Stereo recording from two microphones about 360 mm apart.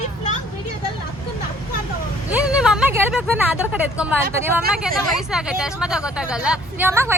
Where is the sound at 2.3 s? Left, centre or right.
Centre.